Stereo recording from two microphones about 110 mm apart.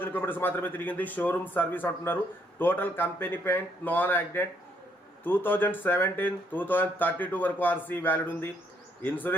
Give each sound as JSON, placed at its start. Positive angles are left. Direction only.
{"t": 0.0, "sound": "a man's voice", "side_deg": 20}
{"t": 9.0, "sound": "bee", "side_deg": 15}